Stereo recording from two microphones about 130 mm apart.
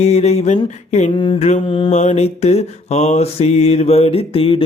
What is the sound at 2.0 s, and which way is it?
Mantra, 60° left (ahead or behind).